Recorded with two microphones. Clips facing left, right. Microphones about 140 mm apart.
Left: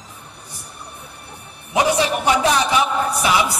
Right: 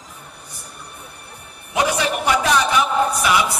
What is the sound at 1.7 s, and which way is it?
Speech, 30° left (ahead or behind).